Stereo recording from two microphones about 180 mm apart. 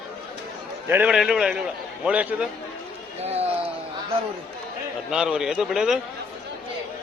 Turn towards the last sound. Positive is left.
turn(degrees=0)  # may be behind; listen again after turning